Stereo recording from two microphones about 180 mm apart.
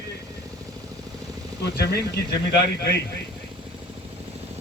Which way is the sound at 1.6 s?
65° left (ahead or behind).